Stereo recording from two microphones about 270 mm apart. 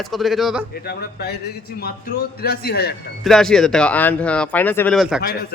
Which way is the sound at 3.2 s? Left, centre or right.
Centre.